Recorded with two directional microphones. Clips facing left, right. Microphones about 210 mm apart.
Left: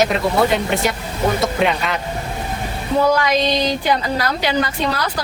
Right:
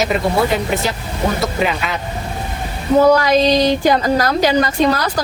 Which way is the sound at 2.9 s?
40° right (ahead or behind).